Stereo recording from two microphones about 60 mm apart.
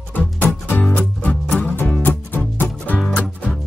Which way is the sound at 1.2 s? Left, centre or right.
Left.